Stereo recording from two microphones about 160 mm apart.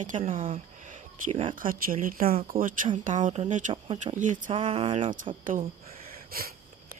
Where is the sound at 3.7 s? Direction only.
35° right (ahead or behind).